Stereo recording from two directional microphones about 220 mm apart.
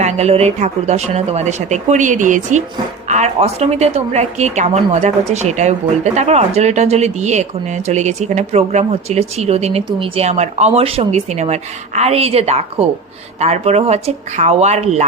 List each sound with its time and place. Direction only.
0.0 s a woman's voice: 30° right (ahead or behind)